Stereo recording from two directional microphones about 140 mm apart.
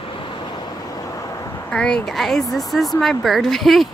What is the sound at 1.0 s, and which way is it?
Vehicle, 25° left (ahead or behind).